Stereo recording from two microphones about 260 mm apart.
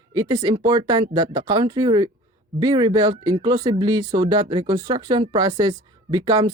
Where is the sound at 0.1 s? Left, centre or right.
Centre.